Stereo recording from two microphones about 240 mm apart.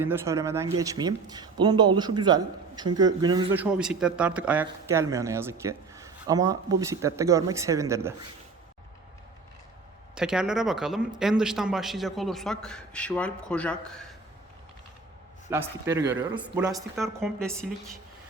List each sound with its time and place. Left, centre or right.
0.0 s speech: centre
10.2 s speech: centre
15.4 s speech: centre
16.9 s speech: centre